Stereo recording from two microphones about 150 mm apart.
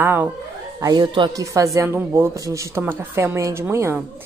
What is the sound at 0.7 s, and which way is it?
Speech, 25° right (ahead or behind).